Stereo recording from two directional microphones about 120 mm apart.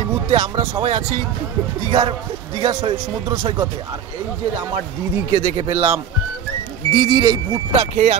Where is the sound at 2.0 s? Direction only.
40° right (ahead or behind).